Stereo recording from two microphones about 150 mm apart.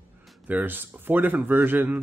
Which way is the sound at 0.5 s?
10° right (ahead or behind).